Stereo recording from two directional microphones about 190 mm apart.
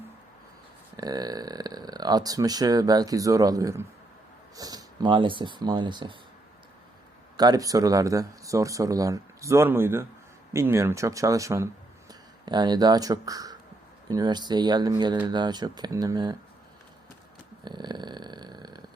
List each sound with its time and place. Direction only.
0.9 s speech: 20° right (ahead or behind)
7.3 s speech: 20° right (ahead or behind)
17.7 s snoring: 25° right (ahead or behind)